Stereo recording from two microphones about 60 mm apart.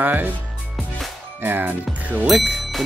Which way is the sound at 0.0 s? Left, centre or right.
Right.